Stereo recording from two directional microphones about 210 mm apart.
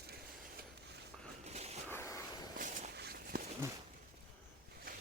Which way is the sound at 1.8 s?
15° left (ahead or behind).